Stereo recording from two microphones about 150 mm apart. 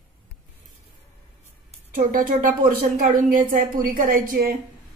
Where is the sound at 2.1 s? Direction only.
70° right (ahead or behind).